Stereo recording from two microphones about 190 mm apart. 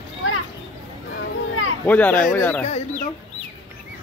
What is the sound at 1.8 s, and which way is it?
Speech, 10° left (ahead or behind).